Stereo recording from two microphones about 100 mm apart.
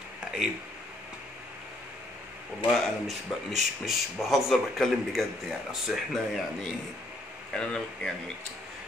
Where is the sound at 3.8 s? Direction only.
Centre (ahead or behind).